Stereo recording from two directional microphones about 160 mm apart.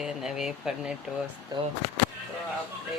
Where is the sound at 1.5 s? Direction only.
25° right (ahead or behind).